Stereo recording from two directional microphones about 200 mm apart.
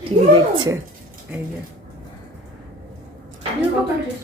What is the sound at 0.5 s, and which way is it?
Speech, 20° right (ahead or behind).